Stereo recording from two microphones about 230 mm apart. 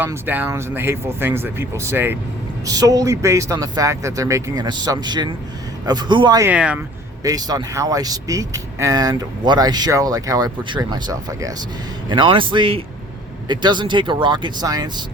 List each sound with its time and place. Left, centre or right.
0.0 s a man's voice: centre